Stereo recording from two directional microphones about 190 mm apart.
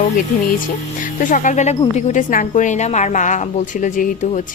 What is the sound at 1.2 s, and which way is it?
A woman's voice, 45° left (ahead or behind).